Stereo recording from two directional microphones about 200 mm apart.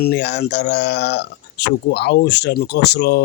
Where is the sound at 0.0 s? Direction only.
55° left (ahead or behind).